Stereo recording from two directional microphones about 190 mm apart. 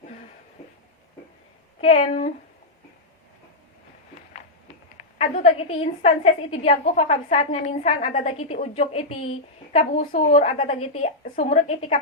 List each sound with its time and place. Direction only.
1.8 s a woman's voice: 35° left (ahead or behind)
5.1 s a woman's voice: 35° left (ahead or behind)